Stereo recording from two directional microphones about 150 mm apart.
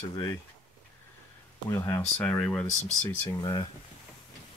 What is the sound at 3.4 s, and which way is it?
Speech, 30° left (ahead or behind).